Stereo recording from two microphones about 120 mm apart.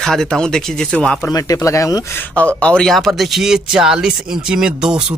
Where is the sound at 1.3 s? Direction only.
25° left (ahead or behind).